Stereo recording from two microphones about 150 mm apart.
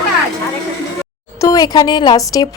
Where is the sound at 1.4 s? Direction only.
25° left (ahead or behind).